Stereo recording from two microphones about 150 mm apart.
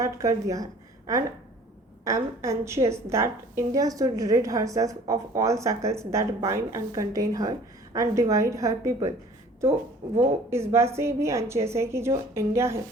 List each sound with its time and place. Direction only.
0.0 s a woman's voice: 20° right (ahead or behind)
10.2 s a woman's voice: 20° right (ahead or behind)